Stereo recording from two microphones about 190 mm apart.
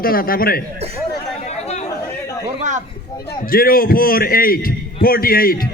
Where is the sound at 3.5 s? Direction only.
50° left (ahead or behind).